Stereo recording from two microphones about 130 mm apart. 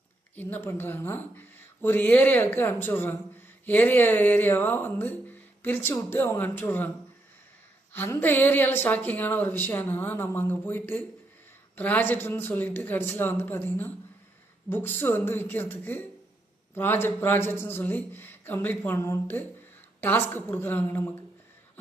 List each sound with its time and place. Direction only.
0.4 s speech: 20° left (ahead or behind)
7.9 s speech: 15° left (ahead or behind)